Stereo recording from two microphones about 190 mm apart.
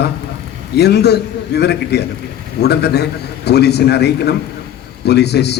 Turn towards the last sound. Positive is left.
turn(degrees=60)  # may be behind; listen again after turning